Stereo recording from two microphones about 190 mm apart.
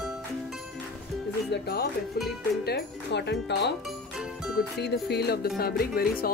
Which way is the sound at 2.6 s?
60° left (ahead or behind).